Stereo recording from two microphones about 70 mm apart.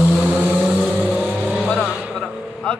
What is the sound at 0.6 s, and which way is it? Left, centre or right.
Vehicle, centre.